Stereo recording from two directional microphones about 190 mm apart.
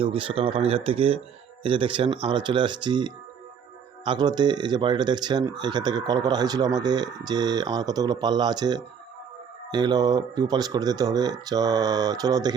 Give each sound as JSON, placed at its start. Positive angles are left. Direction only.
{"t": 0.0, "sound": "speech", "side_deg": -30}